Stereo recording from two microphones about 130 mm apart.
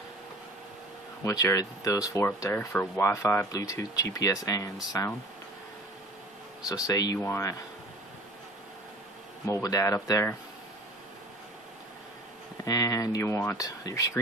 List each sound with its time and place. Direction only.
1.2 s speech: 25° left (ahead or behind)
6.7 s speech: 30° left (ahead or behind)
7.2 s speech: 15° left (ahead or behind)
9.5 s speech: 25° left (ahead or behind)
12.6 s speech: 25° left (ahead or behind)